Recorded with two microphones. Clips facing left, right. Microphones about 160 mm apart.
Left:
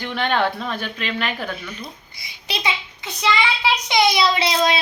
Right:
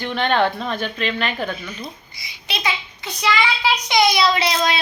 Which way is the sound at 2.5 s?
25° left (ahead or behind).